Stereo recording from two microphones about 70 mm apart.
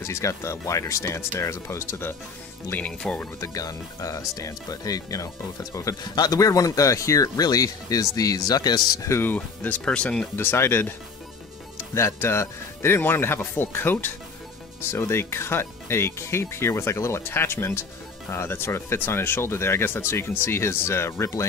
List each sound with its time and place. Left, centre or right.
0.0 s speech: left
3.0 s speech: centre
3.3 s speech: left
9.2 s speech: left
10.3 s speech: left